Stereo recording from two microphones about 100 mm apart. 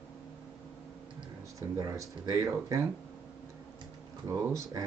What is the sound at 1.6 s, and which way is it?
Speech, 30° right (ahead or behind).